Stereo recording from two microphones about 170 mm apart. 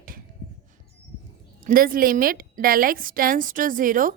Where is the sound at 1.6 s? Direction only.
55° right (ahead or behind).